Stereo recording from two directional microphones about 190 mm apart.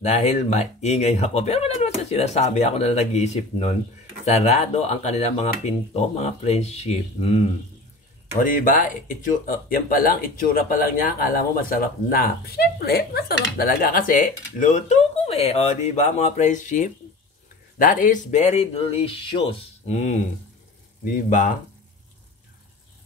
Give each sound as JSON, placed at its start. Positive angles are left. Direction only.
{"t": 0.0, "sound": "speech", "side_deg": 35}
{"t": 8.5, "sound": "speech", "side_deg": 45}